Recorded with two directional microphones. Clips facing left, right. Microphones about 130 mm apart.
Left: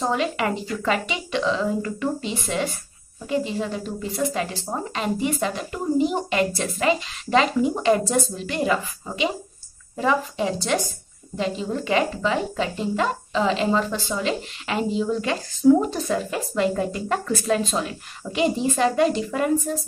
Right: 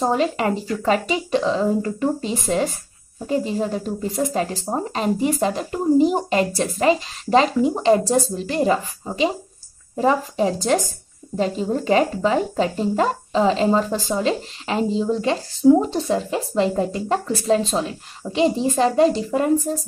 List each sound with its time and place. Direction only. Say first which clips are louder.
0.0 s speech: right 4 dB; 35° right (ahead or behind)